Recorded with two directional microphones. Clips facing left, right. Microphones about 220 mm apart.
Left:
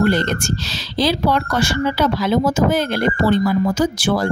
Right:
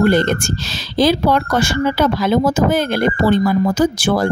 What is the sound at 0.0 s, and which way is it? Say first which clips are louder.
Speech: right 3 dB; 50° right (ahead or behind).